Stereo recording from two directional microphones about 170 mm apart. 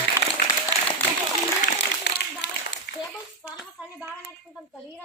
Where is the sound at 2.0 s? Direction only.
90° left.